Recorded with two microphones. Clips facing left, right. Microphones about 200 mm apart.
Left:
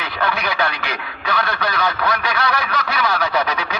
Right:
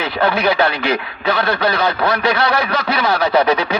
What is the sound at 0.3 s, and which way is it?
Speech, 30° right (ahead or behind).